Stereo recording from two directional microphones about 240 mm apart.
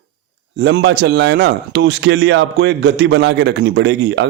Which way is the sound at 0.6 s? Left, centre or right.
Right.